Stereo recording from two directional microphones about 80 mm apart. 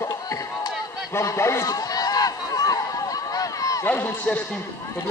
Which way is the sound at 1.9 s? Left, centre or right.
Left.